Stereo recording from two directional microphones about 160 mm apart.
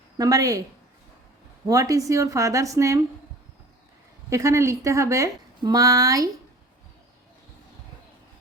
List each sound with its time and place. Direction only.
0.2 s speech: 20° right (ahead or behind)
1.6 s speech: 20° right (ahead or behind)
4.3 s speech: 20° right (ahead or behind)